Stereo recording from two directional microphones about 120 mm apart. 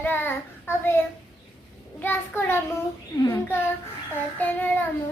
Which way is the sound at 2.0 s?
20° left (ahead or behind).